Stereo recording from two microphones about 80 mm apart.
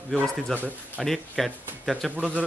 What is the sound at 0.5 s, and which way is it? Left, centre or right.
Speech, right.